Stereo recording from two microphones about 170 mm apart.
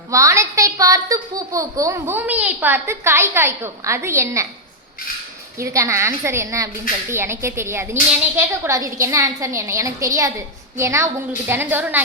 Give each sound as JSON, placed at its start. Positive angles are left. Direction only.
{"t": 0.1, "sound": "a child's voice", "side_deg": -20}
{"t": 5.5, "sound": "a child's voice", "side_deg": -15}